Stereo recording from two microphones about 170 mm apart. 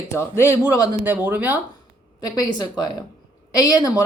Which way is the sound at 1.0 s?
10° right (ahead or behind).